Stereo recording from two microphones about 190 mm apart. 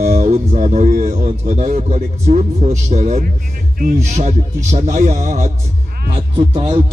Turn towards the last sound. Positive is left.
turn(degrees=-30)  # may be behind; listen again after turning